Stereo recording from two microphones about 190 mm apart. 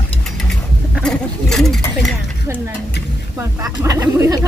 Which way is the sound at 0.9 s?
5° left (ahead or behind).